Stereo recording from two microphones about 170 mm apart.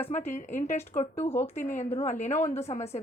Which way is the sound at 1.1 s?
15° left (ahead or behind).